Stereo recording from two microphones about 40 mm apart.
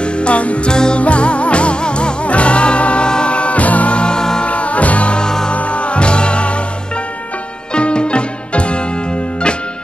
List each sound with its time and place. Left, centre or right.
0.0 s music: left
0.7 s music: left
4.5 s music: left
5.2 s music: centre
5.5 s music: left
7.7 s music: left